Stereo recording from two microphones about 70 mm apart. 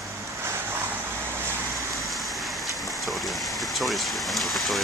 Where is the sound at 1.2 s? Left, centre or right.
Right.